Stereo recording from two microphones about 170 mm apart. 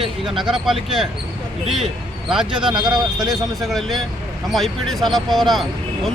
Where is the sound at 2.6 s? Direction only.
25° right (ahead or behind).